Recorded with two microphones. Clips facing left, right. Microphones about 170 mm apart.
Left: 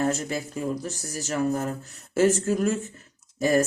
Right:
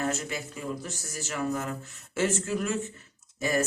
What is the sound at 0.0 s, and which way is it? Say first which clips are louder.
Speech: left 5 dB; 35° left (ahead or behind).